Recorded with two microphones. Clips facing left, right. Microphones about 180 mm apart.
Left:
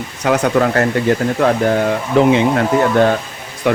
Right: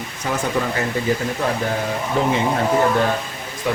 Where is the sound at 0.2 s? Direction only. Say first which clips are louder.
Left 8 dB; 75° left (ahead or behind).